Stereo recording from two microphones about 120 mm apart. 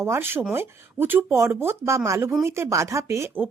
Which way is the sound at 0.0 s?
20° right (ahead or behind).